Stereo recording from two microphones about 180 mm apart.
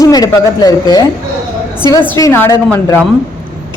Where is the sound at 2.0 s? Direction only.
15° left (ahead or behind).